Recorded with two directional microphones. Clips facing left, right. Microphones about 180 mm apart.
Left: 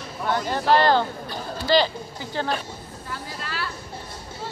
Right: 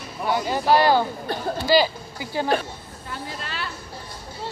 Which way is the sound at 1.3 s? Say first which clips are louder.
Right 5 dB; 60° right (ahead or behind).